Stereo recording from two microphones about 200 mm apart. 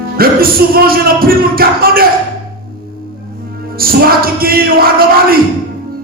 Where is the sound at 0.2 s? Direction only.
45° right (ahead or behind).